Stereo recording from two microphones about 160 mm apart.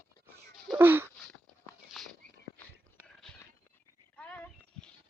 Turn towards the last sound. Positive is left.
turn(degrees=10)  # may be behind; listen again after turning